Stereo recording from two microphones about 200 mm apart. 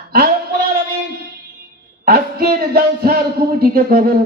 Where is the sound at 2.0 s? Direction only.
50° right (ahead or behind).